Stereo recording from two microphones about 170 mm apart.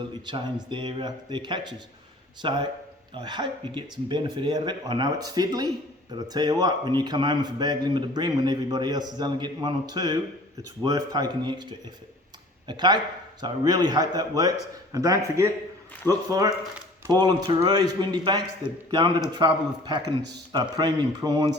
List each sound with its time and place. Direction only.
0.1 s speech: 25° right (ahead or behind)
12.6 s speech: 25° right (ahead or behind)